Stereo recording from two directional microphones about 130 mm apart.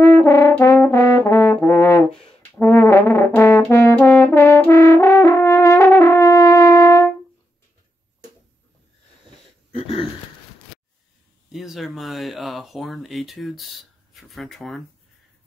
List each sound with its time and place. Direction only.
0.0 s brass instrument: 20° left (ahead or behind)
3.7 s french horn: 15° left (ahead or behind)
11.5 s a sound: centre (ahead or behind)